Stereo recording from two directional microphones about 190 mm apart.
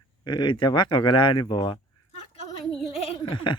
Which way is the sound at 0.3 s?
25° left (ahead or behind).